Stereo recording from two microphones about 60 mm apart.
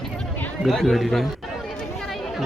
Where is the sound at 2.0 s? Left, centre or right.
Centre.